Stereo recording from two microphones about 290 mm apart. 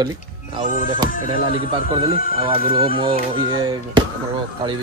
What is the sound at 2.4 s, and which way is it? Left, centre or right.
Speech, centre.